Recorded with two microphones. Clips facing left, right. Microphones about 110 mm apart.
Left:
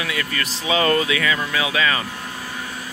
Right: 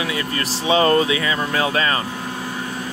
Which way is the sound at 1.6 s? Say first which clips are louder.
Right 3 dB; 40° right (ahead or behind).